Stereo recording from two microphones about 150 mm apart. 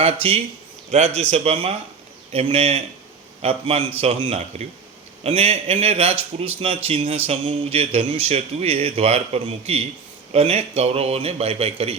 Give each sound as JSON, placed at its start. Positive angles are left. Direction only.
{"t": 0.0, "sound": "speech", "side_deg": -40}